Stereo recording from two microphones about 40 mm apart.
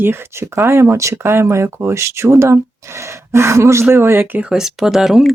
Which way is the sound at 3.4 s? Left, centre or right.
Right.